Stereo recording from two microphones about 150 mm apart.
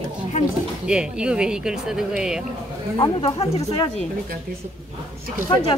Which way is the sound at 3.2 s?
45° left (ahead or behind).